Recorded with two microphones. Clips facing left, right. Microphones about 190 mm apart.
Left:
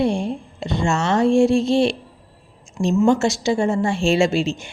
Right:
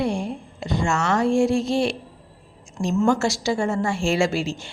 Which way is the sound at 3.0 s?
20° left (ahead or behind).